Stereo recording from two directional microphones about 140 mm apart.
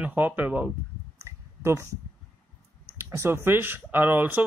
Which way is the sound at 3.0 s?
20° right (ahead or behind).